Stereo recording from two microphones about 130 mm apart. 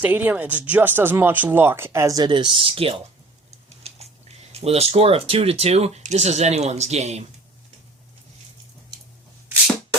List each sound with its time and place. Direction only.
0.0 s speech: 15° right (ahead or behind); by 7.3 s 55° right (ahead or behind)